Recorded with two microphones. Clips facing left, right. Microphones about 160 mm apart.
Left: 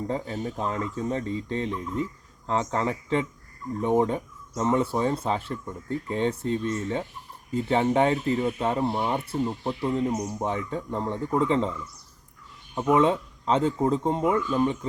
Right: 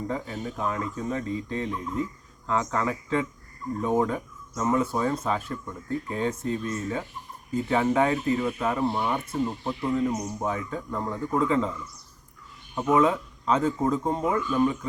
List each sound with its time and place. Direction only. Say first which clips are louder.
0.1 s speech: left 2 dB; 30° left (ahead or behind)
12.7 s speech: left 1 dB; 25° left (ahead or behind)